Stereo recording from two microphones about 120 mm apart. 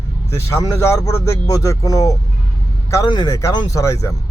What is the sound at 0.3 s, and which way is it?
Speech, 20° left (ahead or behind).